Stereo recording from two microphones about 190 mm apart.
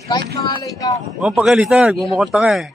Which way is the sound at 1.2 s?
5° right (ahead or behind).